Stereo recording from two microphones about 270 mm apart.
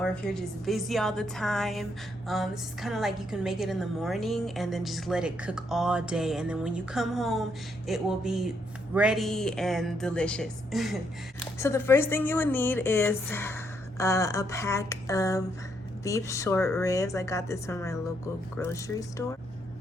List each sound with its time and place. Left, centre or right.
0.0 s a woman's voice: centre